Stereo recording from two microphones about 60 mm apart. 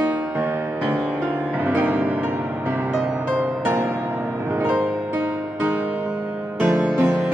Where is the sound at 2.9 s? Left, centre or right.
Centre.